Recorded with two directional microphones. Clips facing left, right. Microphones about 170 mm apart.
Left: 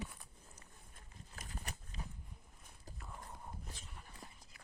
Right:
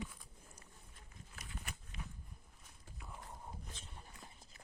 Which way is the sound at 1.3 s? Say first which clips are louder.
Left 2 dB; 40° left (ahead or behind).